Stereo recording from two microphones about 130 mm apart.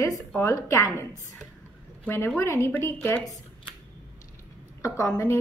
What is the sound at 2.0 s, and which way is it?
Speech, 20° left (ahead or behind).